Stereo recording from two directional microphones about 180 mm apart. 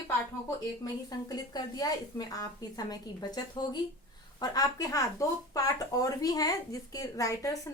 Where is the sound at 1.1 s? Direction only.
20° left (ahead or behind).